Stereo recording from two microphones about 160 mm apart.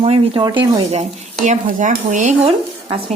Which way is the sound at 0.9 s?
45° right (ahead or behind).